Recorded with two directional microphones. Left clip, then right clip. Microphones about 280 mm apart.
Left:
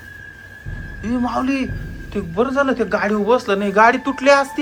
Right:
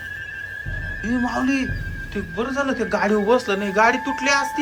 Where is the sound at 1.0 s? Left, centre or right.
Centre.